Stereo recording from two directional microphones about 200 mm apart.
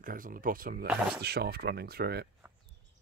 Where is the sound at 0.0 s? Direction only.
45° right (ahead or behind).